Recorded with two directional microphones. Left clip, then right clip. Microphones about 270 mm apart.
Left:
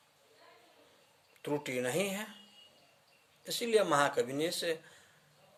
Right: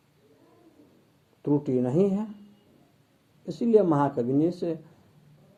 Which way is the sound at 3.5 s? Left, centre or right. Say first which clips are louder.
Right 7 dB; centre.